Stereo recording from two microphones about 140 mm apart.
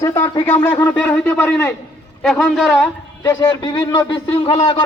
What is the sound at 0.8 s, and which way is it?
Speech, 10° left (ahead or behind).